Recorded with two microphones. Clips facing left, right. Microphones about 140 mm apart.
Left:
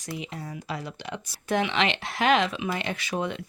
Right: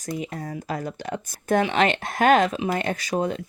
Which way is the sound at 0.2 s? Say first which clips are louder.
Right 5 dB; 45° right (ahead or behind).